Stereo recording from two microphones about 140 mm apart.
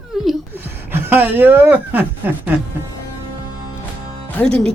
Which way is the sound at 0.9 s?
15° right (ahead or behind).